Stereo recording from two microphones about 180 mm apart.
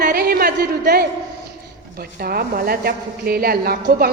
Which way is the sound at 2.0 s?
55° right (ahead or behind).